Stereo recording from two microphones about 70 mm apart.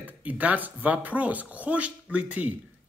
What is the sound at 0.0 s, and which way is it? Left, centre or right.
Speech, right.